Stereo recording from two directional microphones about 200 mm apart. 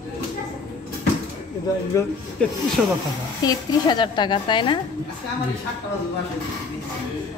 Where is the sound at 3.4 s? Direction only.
20° left (ahead or behind).